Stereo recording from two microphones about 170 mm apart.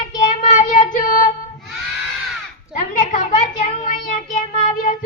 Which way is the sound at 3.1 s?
50° left (ahead or behind).